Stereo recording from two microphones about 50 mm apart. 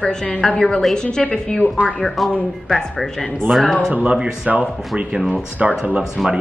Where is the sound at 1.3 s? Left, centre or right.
Centre.